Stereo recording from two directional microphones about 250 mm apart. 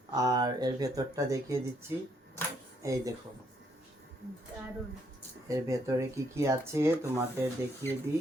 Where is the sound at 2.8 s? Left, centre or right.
Centre.